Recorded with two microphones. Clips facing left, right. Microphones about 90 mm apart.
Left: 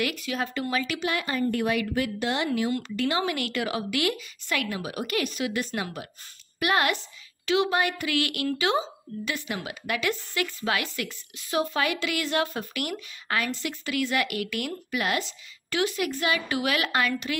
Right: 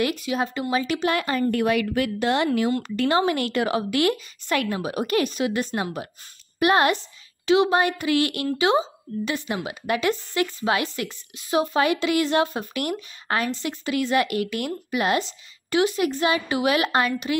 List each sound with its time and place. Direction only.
0.0 s speech: 20° right (ahead or behind)
1.0 s speech: 60° right (ahead or behind)
2.8 s a woman's voice: 45° right (ahead or behind); by 17.1 s 25° right (ahead or behind)